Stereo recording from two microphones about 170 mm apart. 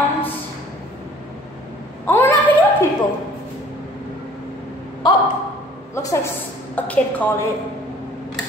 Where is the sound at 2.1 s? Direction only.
15° left (ahead or behind).